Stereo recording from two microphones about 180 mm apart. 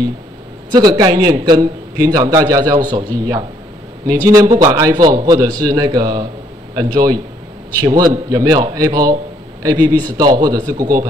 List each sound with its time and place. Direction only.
0.7 s a man's voice: 20° right (ahead or behind)